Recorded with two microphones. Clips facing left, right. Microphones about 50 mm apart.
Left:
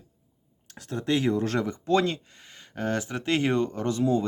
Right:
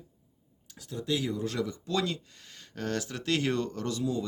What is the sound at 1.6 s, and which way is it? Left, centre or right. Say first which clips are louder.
Speech: left 7 dB; left.